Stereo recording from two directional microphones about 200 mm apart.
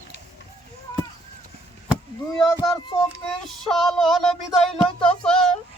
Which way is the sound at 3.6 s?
Centre (ahead or behind).